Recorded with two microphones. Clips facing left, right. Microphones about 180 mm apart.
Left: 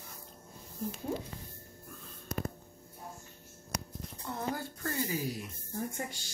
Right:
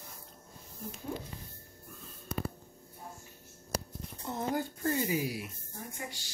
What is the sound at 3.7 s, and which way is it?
Speech, 20° right (ahead or behind).